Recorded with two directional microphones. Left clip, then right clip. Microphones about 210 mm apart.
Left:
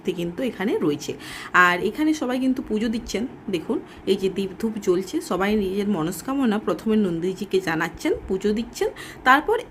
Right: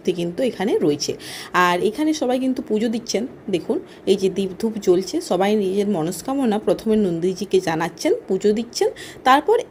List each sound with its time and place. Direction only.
0.0 s speech: 5° right (ahead or behind)